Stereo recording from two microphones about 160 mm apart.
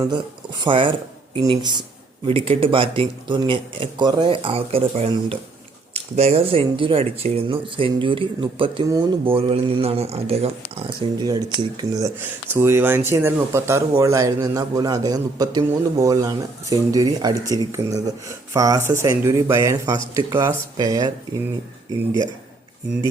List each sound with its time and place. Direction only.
0.6 s a man's voice: 30° right (ahead or behind)
10.8 s a man's voice: 25° right (ahead or behind)